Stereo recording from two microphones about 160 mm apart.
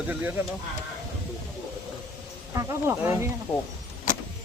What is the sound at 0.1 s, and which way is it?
Speech, 10° right (ahead or behind).